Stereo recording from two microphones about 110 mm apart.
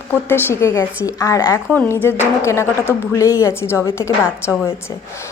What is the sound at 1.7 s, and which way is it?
A woman's voice, 20° left (ahead or behind).